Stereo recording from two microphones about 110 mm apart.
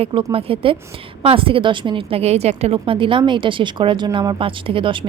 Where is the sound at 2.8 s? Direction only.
50° right (ahead or behind).